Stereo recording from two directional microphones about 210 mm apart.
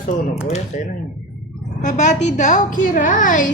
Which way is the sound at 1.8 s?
35° left (ahead or behind).